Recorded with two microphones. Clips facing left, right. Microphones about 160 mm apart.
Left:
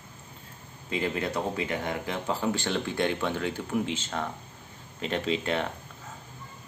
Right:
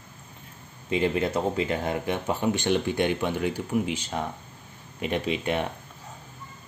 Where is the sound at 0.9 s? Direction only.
25° right (ahead or behind).